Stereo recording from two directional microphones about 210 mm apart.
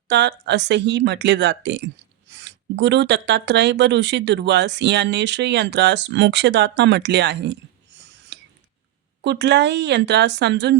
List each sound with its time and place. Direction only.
0.1 s speech: 55° right (ahead or behind)
8.3 s a sound: 55° right (ahead or behind)
9.2 s speech: 55° right (ahead or behind)